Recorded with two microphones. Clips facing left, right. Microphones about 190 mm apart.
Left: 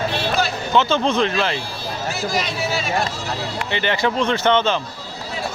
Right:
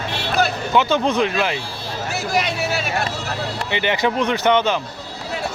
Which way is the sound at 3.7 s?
15° right (ahead or behind).